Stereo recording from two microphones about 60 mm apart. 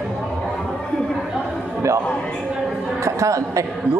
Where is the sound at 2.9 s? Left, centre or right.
Right.